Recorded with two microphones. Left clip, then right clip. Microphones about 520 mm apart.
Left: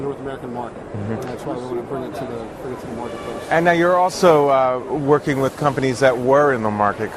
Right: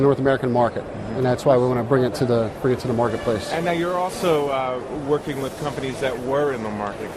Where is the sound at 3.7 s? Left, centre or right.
Left.